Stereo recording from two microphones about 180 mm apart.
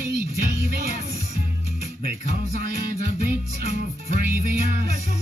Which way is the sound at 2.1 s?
55° right (ahead or behind).